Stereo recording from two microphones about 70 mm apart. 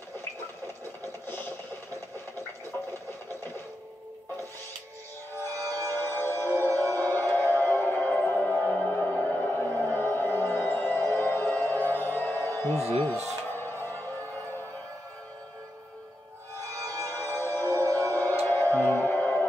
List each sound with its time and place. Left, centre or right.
1.2 s vehicle: left
2.9 s a sound: left
5.4 s music: left
17.1 s music: left
17.8 s music: right
18.1 s music: left